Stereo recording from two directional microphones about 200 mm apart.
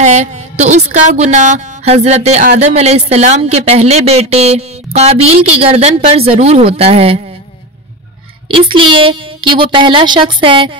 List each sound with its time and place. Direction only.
0.0 s speech: 35° right (ahead or behind)
8.5 s a child's voice: 25° right (ahead or behind)